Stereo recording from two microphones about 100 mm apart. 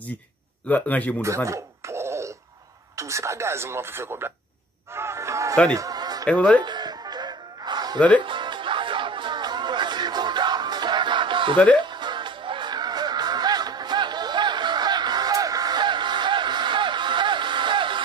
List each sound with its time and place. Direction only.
0.7 s speech: 15° left (ahead or behind)
1.2 s a sound: 30° right (ahead or behind)
3.0 s speech: 30° right (ahead or behind)
4.9 s music: 25° right (ahead or behind)
5.8 s a sound: 40° right (ahead or behind)
6.2 s speech: 15° left (ahead or behind)
6.6 s music: 45° right (ahead or behind)
11.5 s speech: 10° left (ahead or behind)
11.8 s music: 50° right (ahead or behind)